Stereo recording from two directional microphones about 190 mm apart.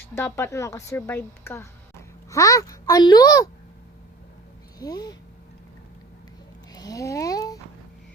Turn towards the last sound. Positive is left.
turn(degrees=20)  # may be behind; listen again after turning